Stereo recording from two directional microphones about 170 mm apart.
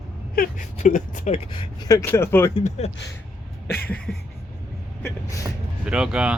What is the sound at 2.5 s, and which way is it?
Speech, 40° left (ahead or behind).